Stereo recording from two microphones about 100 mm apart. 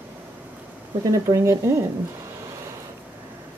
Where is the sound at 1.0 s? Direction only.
35° right (ahead or behind).